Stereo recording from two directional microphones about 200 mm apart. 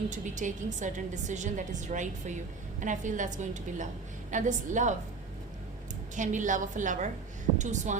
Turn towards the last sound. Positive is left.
turn(degrees=-35)  # may be behind; listen again after turning